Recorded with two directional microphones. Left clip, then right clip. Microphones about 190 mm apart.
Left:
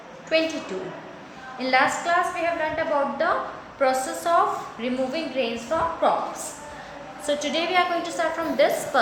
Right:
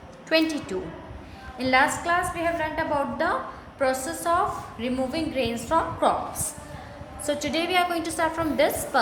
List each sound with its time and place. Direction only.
0.3 s a woman's voice: 25° right (ahead or behind)
1.5 s a woman's voice: 20° right (ahead or behind)
4.8 s a woman's voice: 30° right (ahead or behind)
7.3 s a woman's voice: 20° right (ahead or behind)